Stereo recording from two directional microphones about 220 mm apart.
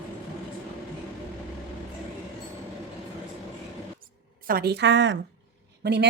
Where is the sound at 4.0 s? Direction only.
40° right (ahead or behind).